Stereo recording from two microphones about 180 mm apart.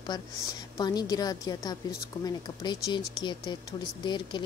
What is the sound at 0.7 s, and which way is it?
Speech, 20° left (ahead or behind).